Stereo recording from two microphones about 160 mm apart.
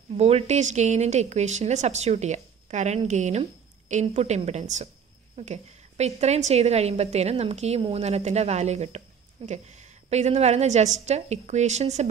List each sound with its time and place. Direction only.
0.2 s a woman's voice: 40° right (ahead or behind)